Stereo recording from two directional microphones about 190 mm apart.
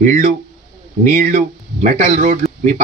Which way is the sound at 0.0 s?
40° right (ahead or behind).